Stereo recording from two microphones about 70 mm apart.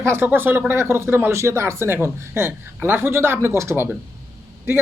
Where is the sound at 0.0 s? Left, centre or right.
Right.